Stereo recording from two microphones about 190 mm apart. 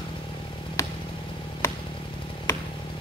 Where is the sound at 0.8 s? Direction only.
15° left (ahead or behind).